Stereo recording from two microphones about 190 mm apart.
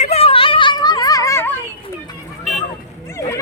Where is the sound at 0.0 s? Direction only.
30° left (ahead or behind); by 1.5 s 15° left (ahead or behind).